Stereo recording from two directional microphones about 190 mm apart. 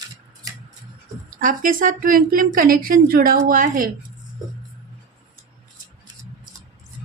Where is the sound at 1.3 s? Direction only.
45° right (ahead or behind).